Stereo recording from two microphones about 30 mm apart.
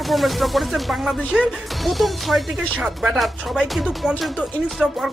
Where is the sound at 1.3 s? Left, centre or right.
Right.